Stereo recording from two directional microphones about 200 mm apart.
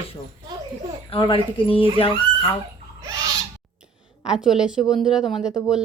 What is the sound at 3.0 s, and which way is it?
Owl, 20° right (ahead or behind).